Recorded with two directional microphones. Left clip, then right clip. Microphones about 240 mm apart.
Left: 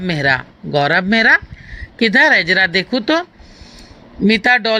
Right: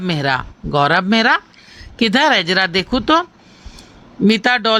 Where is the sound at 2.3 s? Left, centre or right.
Right.